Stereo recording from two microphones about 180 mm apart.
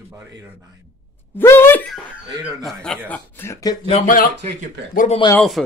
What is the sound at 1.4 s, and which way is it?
Speech, 10° left (ahead or behind).